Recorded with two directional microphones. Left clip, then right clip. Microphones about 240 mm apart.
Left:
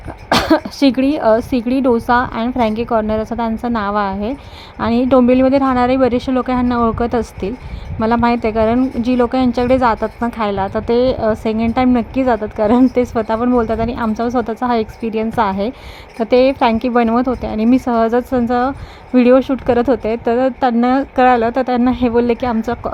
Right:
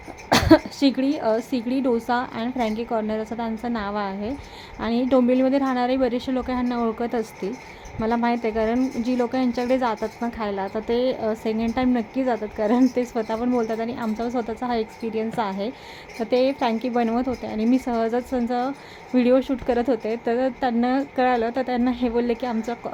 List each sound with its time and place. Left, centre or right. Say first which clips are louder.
0.3 s a woman's voice: left 3 dB; left